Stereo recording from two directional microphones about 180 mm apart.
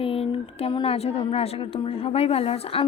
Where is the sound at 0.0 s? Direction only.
30° left (ahead or behind).